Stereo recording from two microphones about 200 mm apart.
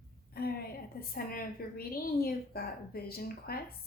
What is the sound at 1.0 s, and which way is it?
A woman's voice, 50° left (ahead or behind).